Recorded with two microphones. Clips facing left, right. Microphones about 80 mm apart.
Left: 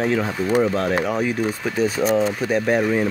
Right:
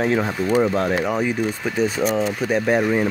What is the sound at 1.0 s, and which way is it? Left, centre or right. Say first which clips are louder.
Speech: even; centre.